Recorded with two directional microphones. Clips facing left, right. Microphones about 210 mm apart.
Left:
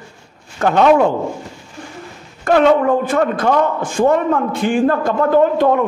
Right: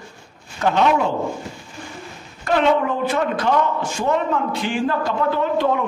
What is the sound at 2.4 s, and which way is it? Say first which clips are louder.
A man's voice: left 6 dB; 50° left (ahead or behind).